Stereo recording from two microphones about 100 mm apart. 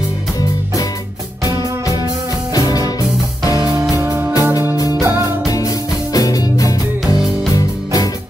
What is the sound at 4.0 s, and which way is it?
Music, 30° right (ahead or behind).